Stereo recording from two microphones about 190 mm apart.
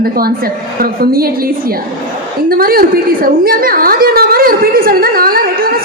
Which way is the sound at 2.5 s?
50° right (ahead or behind).